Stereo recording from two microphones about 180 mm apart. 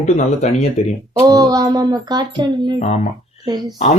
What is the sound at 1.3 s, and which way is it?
Music, 20° right (ahead or behind).